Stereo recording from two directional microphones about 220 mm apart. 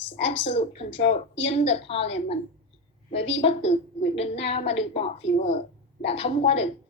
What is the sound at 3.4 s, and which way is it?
A woman's voice, 25° left (ahead or behind).